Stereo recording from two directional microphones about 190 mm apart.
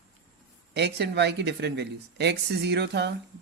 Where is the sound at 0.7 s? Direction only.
65° right (ahead or behind).